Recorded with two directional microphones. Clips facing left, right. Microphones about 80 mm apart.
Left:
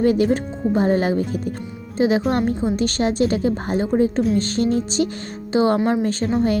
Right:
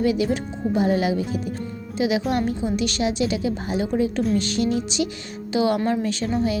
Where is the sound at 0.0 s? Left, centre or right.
Left.